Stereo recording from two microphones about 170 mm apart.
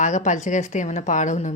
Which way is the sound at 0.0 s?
45° left (ahead or behind).